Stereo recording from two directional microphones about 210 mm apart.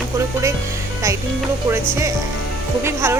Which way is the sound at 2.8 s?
10° right (ahead or behind).